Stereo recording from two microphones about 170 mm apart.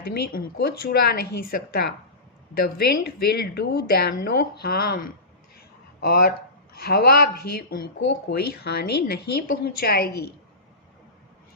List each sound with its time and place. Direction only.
0.1 s speech: 65° left (ahead or behind)
5.5 s a sound: 65° left (ahead or behind)
6.8 s a woman's voice: 65° left (ahead or behind)